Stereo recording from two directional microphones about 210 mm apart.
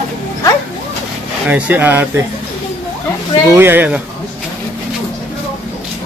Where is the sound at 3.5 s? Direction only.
10° right (ahead or behind).